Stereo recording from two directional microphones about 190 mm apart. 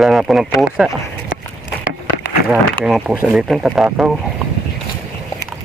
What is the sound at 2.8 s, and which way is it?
Speech, 5° right (ahead or behind).